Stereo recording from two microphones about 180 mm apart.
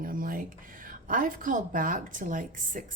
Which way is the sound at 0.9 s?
50° right (ahead or behind).